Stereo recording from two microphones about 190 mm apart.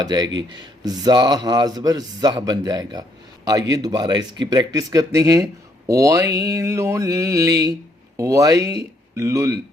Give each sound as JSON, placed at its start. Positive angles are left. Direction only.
{"t": 0.0, "sound": "speech", "side_deg": -20}
{"t": 5.9, "sound": "mantra", "side_deg": -15}
{"t": 8.1, "sound": "speech", "side_deg": -15}